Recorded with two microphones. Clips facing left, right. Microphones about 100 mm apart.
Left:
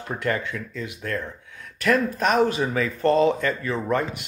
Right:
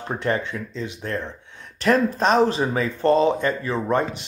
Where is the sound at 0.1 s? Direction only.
25° right (ahead or behind).